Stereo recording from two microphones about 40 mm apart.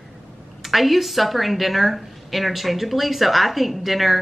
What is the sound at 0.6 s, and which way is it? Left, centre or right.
A woman's voice, centre.